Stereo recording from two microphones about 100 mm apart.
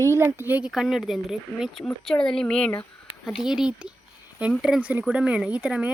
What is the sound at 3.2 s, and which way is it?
Speech, 5° right (ahead or behind).